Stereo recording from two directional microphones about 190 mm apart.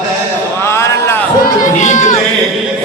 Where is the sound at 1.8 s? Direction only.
40° left (ahead or behind).